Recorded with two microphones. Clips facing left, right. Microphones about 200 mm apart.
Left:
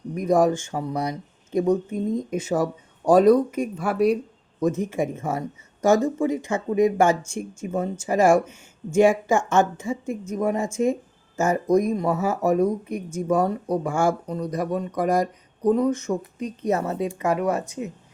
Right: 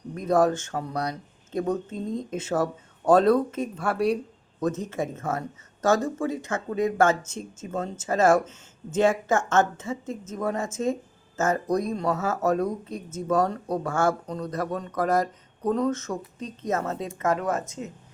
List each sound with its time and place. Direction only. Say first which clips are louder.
0.1 s speech: left 2 dB; 10° left (ahead or behind)